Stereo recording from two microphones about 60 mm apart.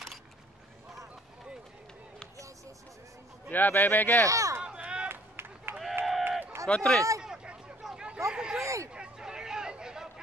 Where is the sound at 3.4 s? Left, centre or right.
Left.